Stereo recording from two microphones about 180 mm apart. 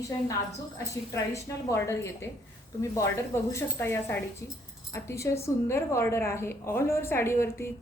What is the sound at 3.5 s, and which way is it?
A woman's voice, 15° left (ahead or behind).